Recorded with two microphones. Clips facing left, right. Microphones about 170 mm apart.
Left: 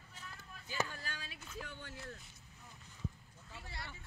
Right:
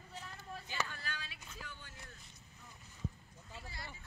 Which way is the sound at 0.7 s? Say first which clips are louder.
Left 3 dB; 40° left (ahead or behind).